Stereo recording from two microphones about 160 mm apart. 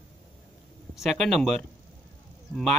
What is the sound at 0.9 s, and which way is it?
Speech, centre (ahead or behind).